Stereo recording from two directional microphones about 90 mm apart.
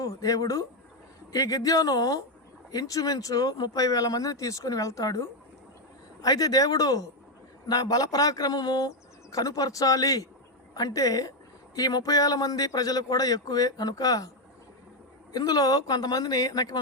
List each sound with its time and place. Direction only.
0.0 s speech: 40° left (ahead or behind)
15.3 s speech: 45° left (ahead or behind)